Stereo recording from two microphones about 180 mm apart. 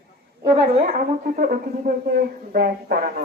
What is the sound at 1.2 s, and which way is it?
Speech, 50° right (ahead or behind).